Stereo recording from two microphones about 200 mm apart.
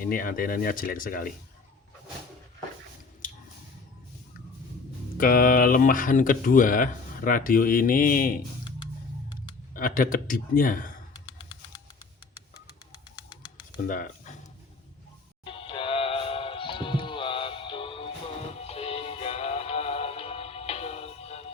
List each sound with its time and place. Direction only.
0.0 s speech: 45° left (ahead or behind)
5.1 s speech: 45° left (ahead or behind)
9.7 s speech: 45° left (ahead or behind)
11.1 s a sound: 20° left (ahead or behind)
13.1 s bird: 20° left (ahead or behind)
13.8 s speech: 40° left (ahead or behind)
15.4 s music: 25° left (ahead or behind)